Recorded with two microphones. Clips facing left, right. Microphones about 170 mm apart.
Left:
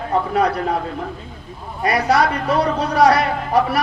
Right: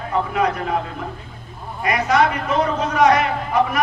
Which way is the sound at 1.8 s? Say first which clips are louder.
Left 1 dB; 35° left (ahead or behind).